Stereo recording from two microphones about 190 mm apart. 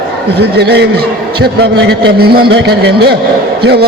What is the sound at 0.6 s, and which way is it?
A man's voice, 60° right (ahead or behind).